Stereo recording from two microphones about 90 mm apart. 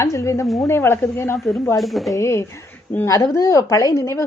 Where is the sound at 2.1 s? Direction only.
30° left (ahead or behind).